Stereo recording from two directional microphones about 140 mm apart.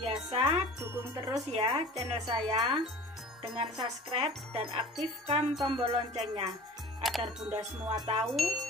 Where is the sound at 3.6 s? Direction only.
40° right (ahead or behind).